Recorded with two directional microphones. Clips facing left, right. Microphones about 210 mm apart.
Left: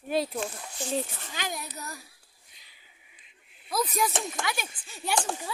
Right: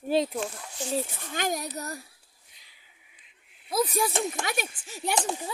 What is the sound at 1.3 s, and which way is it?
Speech, 45° right (ahead or behind).